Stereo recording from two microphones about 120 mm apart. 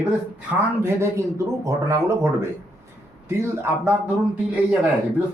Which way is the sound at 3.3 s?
20° right (ahead or behind).